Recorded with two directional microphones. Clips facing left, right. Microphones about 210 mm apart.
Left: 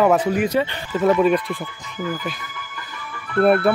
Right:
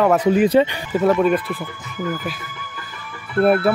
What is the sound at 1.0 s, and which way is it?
Speech, centre (ahead or behind).